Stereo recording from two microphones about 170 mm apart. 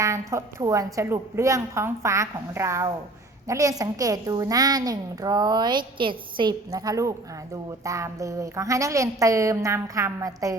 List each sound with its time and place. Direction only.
0.0 s a woman's voice: 20° right (ahead or behind)